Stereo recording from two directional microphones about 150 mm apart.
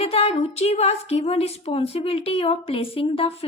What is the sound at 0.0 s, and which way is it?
A woman's voice, 40° left (ahead or behind).